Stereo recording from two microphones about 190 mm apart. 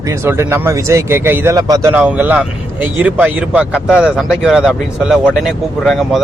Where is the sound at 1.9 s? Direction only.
5° right (ahead or behind).